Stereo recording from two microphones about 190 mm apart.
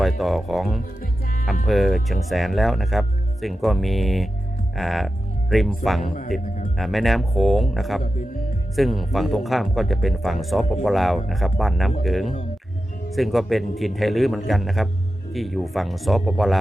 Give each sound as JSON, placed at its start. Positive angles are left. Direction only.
{"t": 0.2, "sound": "speech", "side_deg": 0}
{"t": 6.1, "sound": "speech", "side_deg": 45}
{"t": 6.7, "sound": "speech", "side_deg": 0}